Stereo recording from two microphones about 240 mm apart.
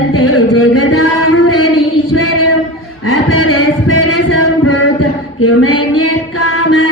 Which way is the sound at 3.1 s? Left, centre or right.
Left.